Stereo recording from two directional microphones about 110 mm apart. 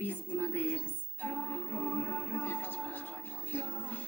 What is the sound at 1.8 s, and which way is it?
Music, 15° left (ahead or behind).